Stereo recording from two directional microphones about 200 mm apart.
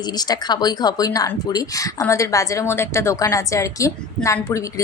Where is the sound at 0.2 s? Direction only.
20° left (ahead or behind).